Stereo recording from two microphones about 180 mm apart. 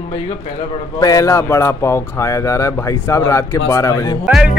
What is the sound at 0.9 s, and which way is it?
Speech, 20° left (ahead or behind).